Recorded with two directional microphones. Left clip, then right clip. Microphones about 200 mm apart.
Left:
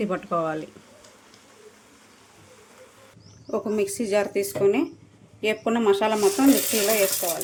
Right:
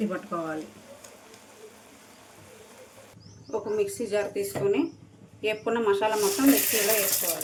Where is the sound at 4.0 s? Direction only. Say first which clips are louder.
Left 5 dB; 55° left (ahead or behind).